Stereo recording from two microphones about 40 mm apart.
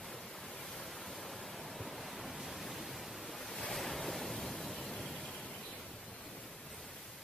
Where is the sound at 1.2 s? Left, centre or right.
Centre.